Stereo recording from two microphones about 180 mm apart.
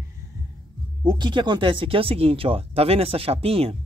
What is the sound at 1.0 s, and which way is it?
Speech, 25° right (ahead or behind).